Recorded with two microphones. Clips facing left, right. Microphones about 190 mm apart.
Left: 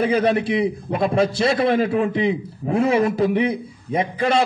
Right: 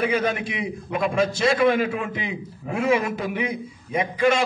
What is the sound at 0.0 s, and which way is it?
A man's voice, 35° left (ahead or behind).